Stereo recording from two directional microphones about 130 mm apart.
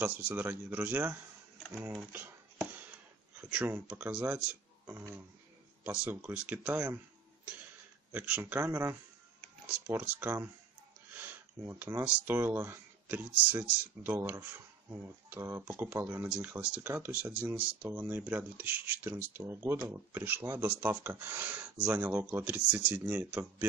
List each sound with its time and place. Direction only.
0.0 s speech: 15° right (ahead or behind)
3.3 s speech: 10° right (ahead or behind)
8.1 s speech: 15° right (ahead or behind)